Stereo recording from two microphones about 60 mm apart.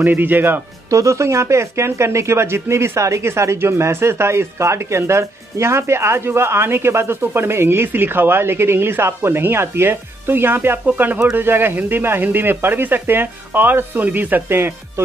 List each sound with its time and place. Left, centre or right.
0.0 s speech: right
0.8 s speech: right